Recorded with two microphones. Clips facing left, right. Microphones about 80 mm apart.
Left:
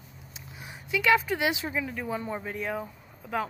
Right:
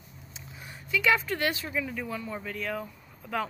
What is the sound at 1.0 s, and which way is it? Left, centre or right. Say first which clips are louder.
A woman's voice: left 2 dB; centre.